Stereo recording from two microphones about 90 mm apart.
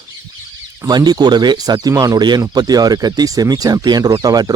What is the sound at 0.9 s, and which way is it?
Speech, 50° right (ahead or behind).